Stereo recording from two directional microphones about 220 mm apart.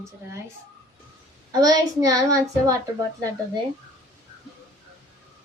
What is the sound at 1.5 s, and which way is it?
A woman's voice, 15° right (ahead or behind).